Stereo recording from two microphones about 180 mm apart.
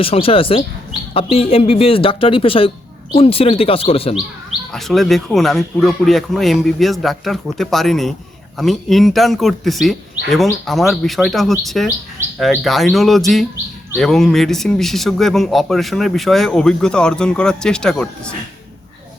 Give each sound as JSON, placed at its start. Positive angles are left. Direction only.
{"t": 0.0, "sound": "speech", "side_deg": 30}
{"t": 4.7, "sound": "a man's voice", "side_deg": 0}